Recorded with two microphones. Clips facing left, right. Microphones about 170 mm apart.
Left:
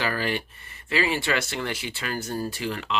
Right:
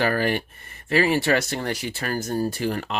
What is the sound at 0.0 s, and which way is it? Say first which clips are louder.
Speech: right 5 dB; 50° right (ahead or behind).